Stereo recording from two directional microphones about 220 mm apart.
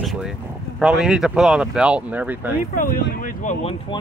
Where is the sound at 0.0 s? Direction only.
Centre (ahead or behind).